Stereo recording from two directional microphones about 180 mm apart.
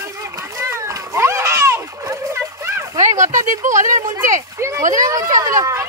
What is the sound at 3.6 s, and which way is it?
Speech, 45° right (ahead or behind).